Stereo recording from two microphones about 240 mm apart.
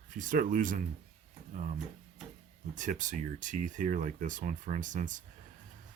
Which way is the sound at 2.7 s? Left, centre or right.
Right.